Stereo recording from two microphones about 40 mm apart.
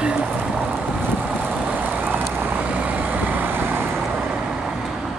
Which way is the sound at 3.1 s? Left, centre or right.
Right.